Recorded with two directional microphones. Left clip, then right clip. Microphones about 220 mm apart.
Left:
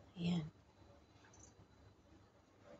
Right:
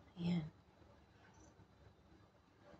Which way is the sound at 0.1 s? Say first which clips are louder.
Left 1 dB; 10° left (ahead or behind).